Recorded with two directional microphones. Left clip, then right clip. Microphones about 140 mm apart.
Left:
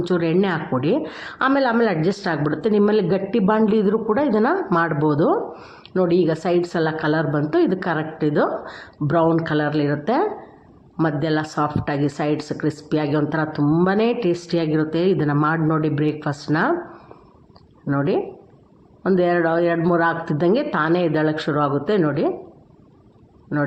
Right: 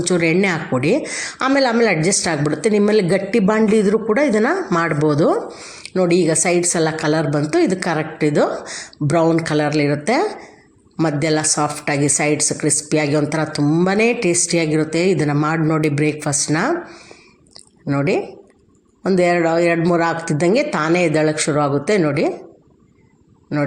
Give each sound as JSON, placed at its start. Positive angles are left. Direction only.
{"t": 0.0, "sound": "a woman's voice", "side_deg": -25}
{"t": 17.8, "sound": "a woman's voice", "side_deg": -20}